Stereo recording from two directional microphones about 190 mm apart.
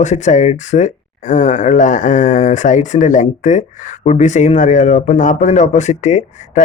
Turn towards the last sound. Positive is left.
turn(degrees=40)  # may be behind; listen again after turning